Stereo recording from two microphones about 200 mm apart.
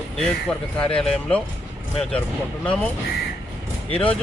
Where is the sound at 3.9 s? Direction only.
30° left (ahead or behind).